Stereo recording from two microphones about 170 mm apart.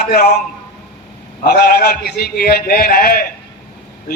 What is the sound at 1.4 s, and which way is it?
A man's voice, 70° left (ahead or behind).